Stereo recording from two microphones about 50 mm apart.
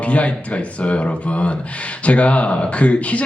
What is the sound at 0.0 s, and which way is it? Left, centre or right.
Speech, left.